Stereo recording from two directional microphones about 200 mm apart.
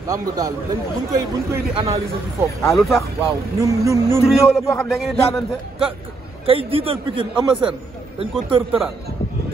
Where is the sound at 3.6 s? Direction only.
15° right (ahead or behind).